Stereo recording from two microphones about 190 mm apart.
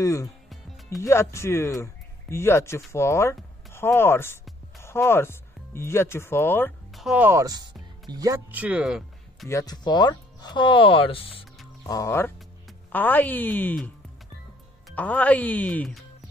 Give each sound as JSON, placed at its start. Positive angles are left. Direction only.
{"t": 0.0, "sound": "speech", "side_deg": 15}
{"t": 6.9, "sound": "speech", "side_deg": 0}
{"t": 9.5, "sound": "speech", "side_deg": 20}
{"t": 11.8, "sound": "speech", "side_deg": 15}